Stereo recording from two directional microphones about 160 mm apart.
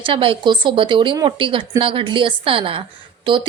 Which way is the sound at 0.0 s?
35° right (ahead or behind).